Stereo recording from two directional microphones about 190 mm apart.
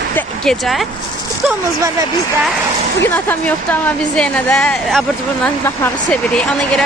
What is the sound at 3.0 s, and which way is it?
Speech, 10° left (ahead or behind).